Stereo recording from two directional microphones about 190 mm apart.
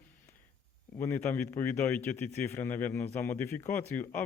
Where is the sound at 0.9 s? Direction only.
10° left (ahead or behind).